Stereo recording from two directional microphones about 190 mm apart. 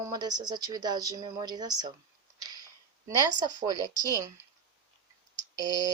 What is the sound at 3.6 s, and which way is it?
Speech, 20° right (ahead or behind).